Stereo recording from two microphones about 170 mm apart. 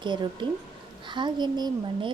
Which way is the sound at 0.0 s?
25° right (ahead or behind).